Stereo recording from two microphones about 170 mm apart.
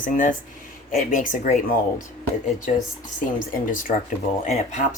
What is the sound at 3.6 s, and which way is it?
Speech, 50° left (ahead or behind).